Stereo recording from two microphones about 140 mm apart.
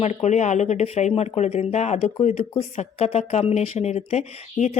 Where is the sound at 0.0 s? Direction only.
55° left (ahead or behind).